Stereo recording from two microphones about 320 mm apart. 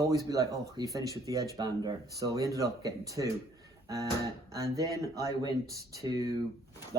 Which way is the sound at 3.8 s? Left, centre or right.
Centre.